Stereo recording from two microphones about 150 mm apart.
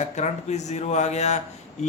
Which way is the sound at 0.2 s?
50° left (ahead or behind).